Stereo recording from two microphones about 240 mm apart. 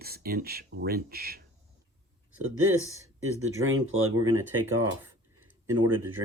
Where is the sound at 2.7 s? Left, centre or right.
Right.